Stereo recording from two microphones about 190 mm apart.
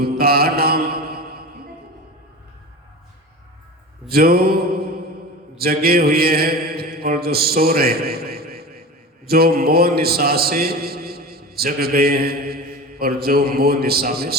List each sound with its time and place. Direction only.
0.0 s mantra: 55° right (ahead or behind)
4.1 s mantra: 55° right (ahead or behind)
5.5 s a man's voice: 55° right (ahead or behind)